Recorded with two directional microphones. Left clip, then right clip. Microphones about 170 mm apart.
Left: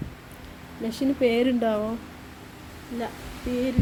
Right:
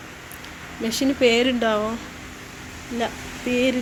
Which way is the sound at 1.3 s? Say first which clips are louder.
Right 4 dB; 15° left (ahead or behind).